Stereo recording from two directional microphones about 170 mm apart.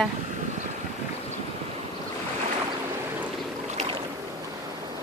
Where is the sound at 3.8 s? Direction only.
30° right (ahead or behind).